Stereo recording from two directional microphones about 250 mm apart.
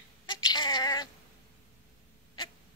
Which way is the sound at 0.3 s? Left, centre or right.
Centre.